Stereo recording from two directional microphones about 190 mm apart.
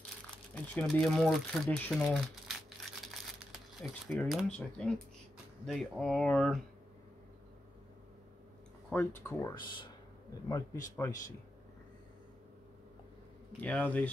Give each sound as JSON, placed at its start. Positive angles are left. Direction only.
{"t": 0.7, "sound": "speech", "side_deg": 5}
{"t": 8.9, "sound": "speech", "side_deg": 15}
{"t": 11.0, "sound": "speech", "side_deg": 15}
{"t": 13.6, "sound": "speech", "side_deg": 10}